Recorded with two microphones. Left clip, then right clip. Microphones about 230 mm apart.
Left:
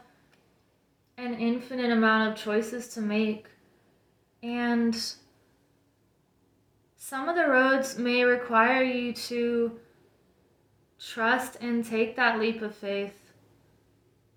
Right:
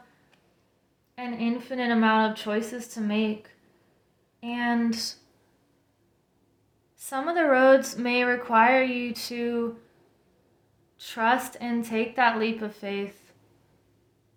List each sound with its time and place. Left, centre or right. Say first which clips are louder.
1.1 s speech: even; right
4.4 s speech: right 1 dB; right
7.0 s speech: right 2 dB; right
10.9 s speech: right 2 dB; right